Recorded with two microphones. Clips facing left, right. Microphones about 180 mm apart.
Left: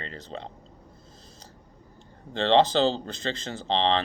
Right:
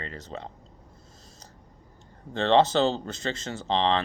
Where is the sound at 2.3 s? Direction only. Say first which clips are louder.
Even; 30° left (ahead or behind).